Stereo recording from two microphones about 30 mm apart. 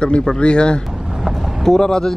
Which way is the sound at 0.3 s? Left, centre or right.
Left.